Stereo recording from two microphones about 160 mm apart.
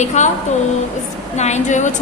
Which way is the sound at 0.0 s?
45° left (ahead or behind).